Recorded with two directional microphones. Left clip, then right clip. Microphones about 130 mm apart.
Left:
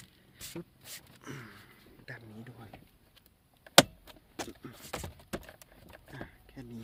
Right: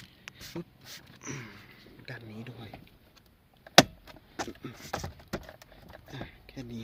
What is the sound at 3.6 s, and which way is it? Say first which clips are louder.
Vehicle: right 2 dB; 25° left (ahead or behind).